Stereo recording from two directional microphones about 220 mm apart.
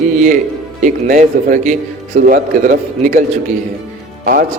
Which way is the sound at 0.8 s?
35° right (ahead or behind).